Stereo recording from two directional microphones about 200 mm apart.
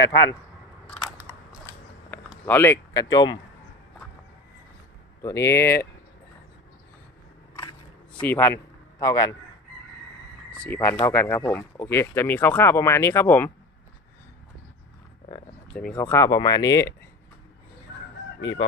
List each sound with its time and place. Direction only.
0.8 s camera: centre (ahead or behind)
2.4 s speech: 10° left (ahead or behind)
5.2 s speech: 15° left (ahead or behind)
8.2 s a man's voice: 10° left (ahead or behind)
10.7 s speech: 10° left (ahead or behind)
15.7 s speech: 5° left (ahead or behind)